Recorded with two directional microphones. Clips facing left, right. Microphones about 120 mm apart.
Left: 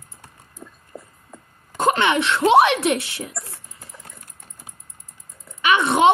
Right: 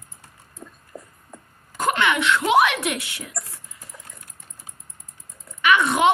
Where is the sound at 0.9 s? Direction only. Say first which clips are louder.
Left 1 dB; 30° left (ahead or behind).